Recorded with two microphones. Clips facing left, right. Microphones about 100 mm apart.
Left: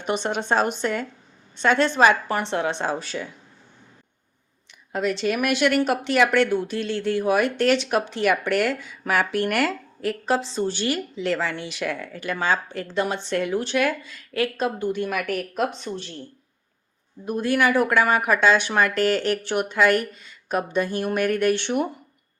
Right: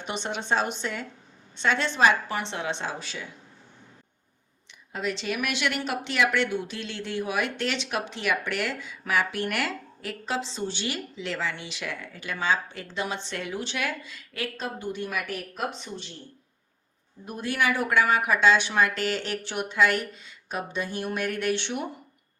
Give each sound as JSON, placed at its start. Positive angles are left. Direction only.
{"t": 0.0, "sound": "speech", "side_deg": 50}
{"t": 4.7, "sound": "speech", "side_deg": 50}
{"t": 17.2, "sound": "speech", "side_deg": 50}